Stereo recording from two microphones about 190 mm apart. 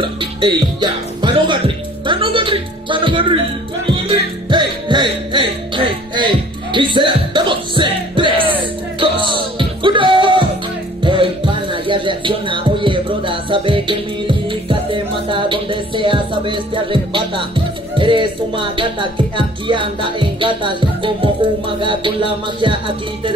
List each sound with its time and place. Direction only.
0.0 s a woman's voice: 25° right (ahead or behind)
3.8 s music: 25° right (ahead or behind)